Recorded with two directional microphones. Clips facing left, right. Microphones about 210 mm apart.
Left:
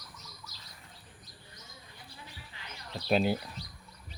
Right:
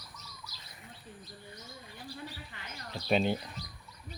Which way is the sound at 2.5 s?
55° right (ahead or behind).